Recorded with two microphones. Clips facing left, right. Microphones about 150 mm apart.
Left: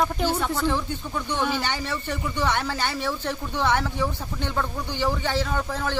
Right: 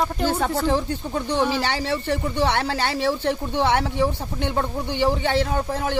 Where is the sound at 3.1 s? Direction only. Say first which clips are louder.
Right 6 dB; 25° right (ahead or behind).